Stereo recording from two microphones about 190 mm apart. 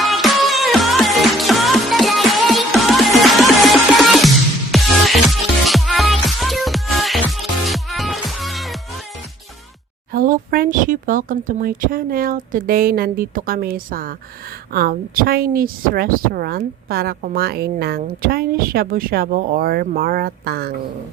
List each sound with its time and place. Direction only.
0.0 s music: centre (ahead or behind)
10.1 s a woman's voice: 45° right (ahead or behind)